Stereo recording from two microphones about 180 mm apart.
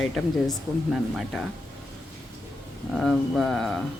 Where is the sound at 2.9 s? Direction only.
Centre (ahead or behind).